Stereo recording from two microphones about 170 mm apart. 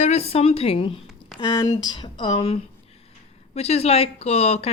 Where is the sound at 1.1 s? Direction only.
Centre (ahead or behind).